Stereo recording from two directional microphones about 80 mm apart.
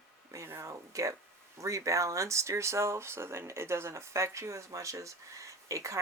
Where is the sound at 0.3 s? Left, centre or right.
Right.